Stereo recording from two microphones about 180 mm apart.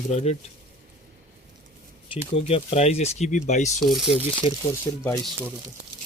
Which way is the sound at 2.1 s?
35° left (ahead or behind).